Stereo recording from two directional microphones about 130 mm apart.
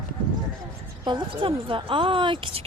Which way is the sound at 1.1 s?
40° right (ahead or behind).